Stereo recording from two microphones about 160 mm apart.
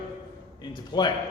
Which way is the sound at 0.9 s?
25° left (ahead or behind).